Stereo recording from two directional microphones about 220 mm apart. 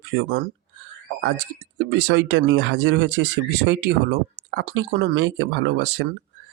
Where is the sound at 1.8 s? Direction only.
55° right (ahead or behind).